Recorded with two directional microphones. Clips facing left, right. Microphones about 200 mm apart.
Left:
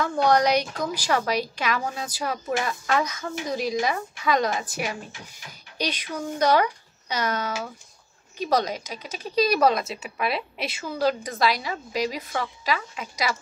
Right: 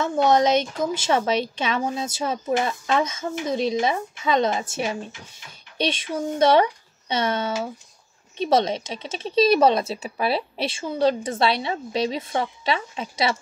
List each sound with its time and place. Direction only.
0.0 s speech: 20° right (ahead or behind)